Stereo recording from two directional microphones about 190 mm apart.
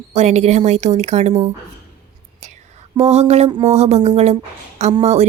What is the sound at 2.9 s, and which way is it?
Speech, 35° right (ahead or behind).